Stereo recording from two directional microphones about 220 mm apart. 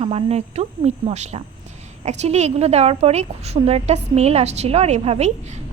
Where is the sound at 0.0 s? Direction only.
25° right (ahead or behind).